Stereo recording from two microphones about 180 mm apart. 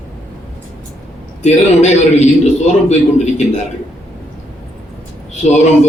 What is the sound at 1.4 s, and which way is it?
A man's voice, 40° left (ahead or behind).